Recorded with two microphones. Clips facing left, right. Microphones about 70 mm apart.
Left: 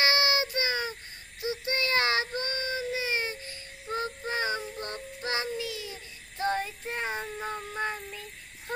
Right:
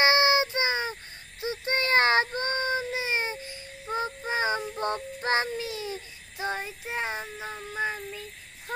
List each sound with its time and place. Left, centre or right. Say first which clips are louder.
0.0 s child singing: right 4 dB; right
6.3 s child singing: left 2 dB; centre
7.0 s child singing: right 1 dB; centre